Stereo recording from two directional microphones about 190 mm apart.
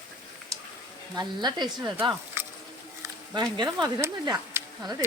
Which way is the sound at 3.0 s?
20° right (ahead or behind).